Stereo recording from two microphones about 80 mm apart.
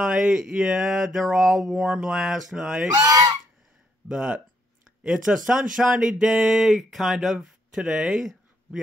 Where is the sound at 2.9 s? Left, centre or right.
Right.